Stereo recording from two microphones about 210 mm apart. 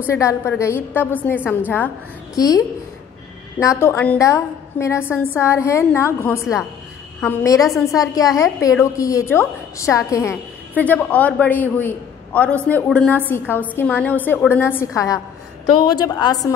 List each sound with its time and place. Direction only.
0.1 s a woman's voice: 15° left (ahead or behind)
7.4 s a woman's voice: 15° left (ahead or behind)